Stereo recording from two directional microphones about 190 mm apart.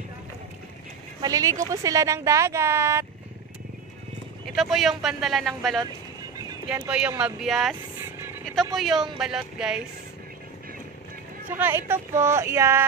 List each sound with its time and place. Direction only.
1.2 s speech: 15° right (ahead or behind)
4.5 s speech: centre (ahead or behind)
6.9 s speech: 5° right (ahead or behind)
8.7 s speech: centre (ahead or behind)
11.5 s speech: 10° right (ahead or behind)